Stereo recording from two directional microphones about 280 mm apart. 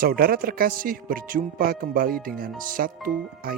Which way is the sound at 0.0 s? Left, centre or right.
Right.